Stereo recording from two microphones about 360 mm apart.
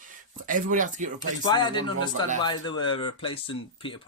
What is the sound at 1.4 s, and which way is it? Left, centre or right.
Speech, centre.